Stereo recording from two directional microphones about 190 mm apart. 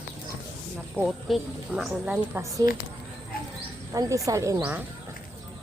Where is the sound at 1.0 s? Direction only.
Centre (ahead or behind).